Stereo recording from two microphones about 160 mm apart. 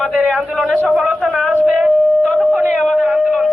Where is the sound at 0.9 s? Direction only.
5° right (ahead or behind).